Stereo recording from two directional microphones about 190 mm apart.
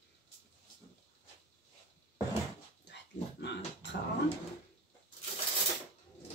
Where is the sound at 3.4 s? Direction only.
70° left (ahead or behind).